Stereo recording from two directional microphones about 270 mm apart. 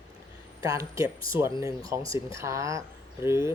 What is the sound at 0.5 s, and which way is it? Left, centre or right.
Speech, centre.